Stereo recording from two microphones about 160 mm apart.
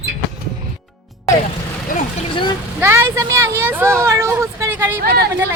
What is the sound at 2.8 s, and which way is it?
Speech, 15° right (ahead or behind).